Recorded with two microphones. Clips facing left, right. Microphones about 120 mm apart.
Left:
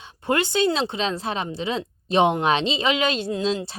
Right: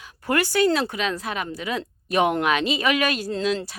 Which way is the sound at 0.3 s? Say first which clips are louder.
Right 1 dB; 20° left (ahead or behind).